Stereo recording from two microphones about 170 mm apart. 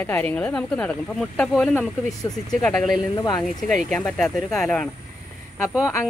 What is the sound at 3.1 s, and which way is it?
Speech, 25° left (ahead or behind).